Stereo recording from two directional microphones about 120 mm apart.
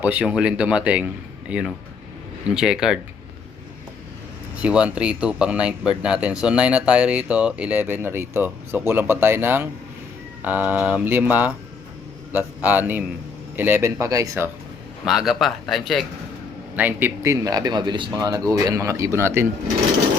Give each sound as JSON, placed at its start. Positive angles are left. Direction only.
{"t": 0.0, "sound": "speech", "side_deg": -10}
{"t": 4.6, "sound": "speech", "side_deg": -10}
{"t": 15.0, "sound": "speech", "side_deg": -5}
{"t": 16.7, "sound": "speech", "side_deg": -15}
{"t": 17.2, "sound": "speech", "side_deg": -30}